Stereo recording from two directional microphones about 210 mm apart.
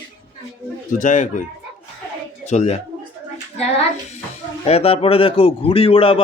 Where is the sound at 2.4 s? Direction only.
35° left (ahead or behind).